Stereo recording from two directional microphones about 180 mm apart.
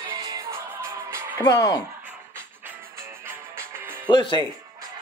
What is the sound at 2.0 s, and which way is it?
Music, 10° right (ahead or behind).